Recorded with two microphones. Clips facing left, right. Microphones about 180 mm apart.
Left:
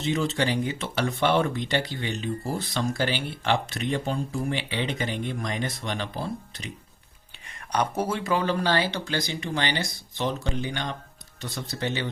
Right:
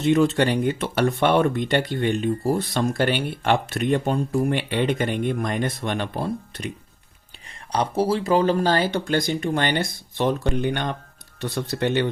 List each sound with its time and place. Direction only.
0.0 s speech: 60° right (ahead or behind)
7.7 s speech: 30° right (ahead or behind); by 12.0 s 60° right (ahead or behind)